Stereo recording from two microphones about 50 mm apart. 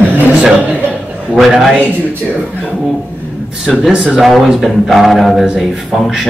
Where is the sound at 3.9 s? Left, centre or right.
Right.